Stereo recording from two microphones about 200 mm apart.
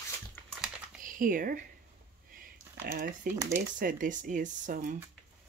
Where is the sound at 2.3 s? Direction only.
45° right (ahead or behind).